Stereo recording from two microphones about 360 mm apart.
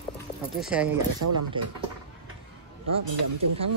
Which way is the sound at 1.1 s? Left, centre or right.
Right.